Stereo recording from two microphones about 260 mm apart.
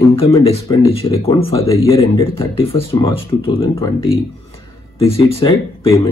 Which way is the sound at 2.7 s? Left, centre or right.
Centre.